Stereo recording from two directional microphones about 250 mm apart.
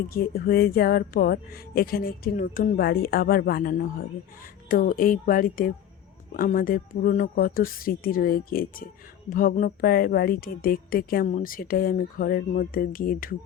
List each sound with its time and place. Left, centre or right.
0.1 s speech: left